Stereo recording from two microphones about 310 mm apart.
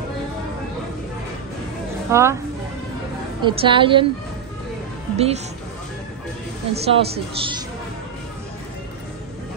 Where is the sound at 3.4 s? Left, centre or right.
Centre.